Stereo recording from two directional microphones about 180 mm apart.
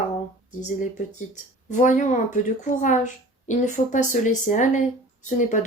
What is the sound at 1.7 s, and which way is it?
Speech, 45° left (ahead or behind).